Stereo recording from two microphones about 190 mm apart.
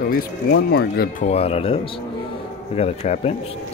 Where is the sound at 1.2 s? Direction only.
35° left (ahead or behind).